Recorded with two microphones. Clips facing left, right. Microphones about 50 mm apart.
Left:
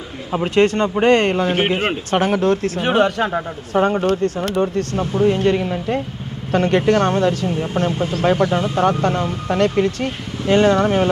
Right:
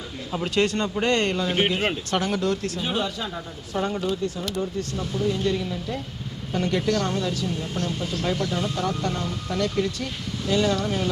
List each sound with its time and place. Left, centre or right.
0.3 s speech: left
2.8 s speech: left